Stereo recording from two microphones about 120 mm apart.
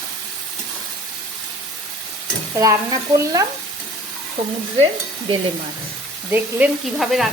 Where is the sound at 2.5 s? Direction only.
25° right (ahead or behind).